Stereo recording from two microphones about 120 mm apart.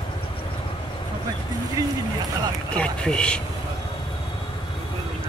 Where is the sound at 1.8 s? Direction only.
30° right (ahead or behind).